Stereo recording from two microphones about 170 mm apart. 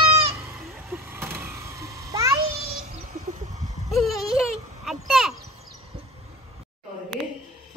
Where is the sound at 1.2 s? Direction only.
15° right (ahead or behind).